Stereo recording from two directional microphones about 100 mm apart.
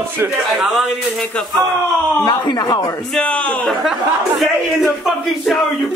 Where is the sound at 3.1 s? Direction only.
10° left (ahead or behind).